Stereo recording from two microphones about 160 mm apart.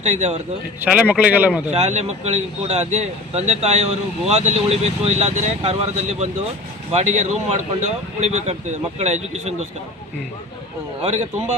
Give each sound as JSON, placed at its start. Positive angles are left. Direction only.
{"t": 0.0, "sound": "speech", "side_deg": -45}
{"t": 0.8, "sound": "speech", "side_deg": -10}
{"t": 1.7, "sound": "speech", "side_deg": -45}
{"t": 11.0, "sound": "speech", "side_deg": -45}